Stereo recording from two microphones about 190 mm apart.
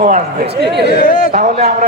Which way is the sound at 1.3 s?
35° right (ahead or behind).